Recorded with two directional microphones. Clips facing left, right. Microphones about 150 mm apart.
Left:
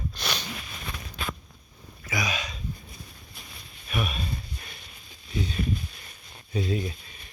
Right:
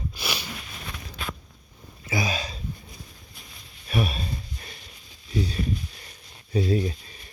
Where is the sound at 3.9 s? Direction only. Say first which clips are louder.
Right 4 dB; 35° right (ahead or behind).